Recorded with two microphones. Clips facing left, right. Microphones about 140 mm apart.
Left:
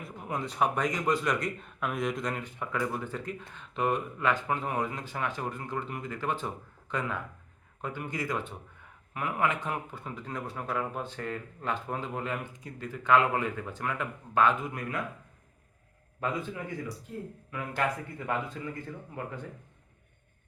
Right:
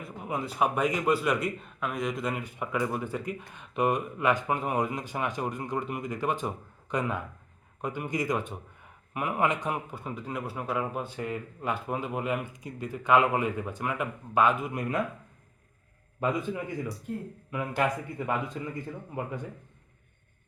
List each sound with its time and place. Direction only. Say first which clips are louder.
0.0 s speech: right 2 dB; 5° right (ahead or behind); by 14.9 s 20° right (ahead or behind)
16.2 s speech: right 4 dB; 15° right (ahead or behind)